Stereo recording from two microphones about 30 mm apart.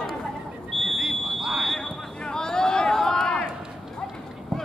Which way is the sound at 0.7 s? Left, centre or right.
Centre.